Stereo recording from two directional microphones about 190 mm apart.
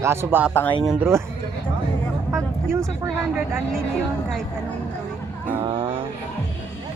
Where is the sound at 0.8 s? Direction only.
5° right (ahead or behind).